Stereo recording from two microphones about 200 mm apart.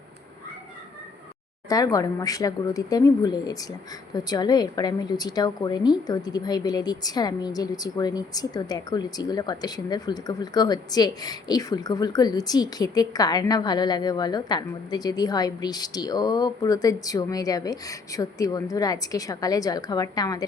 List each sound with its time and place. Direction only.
1.7 s speech: 20° left (ahead or behind)